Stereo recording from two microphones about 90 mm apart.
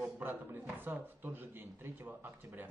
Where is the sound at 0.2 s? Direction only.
25° right (ahead or behind).